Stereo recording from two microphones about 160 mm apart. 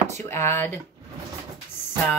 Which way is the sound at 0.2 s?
15° left (ahead or behind).